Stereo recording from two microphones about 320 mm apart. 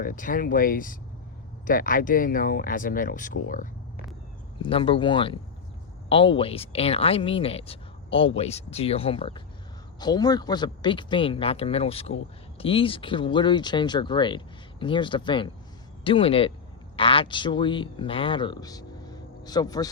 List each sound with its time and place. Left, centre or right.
0.0 s speech: left
4.6 s speech: centre